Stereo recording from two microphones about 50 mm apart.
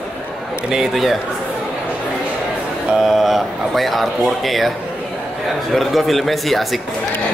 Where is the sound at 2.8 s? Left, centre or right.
Centre.